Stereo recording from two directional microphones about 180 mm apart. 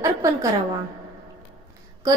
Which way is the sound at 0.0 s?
15° right (ahead or behind).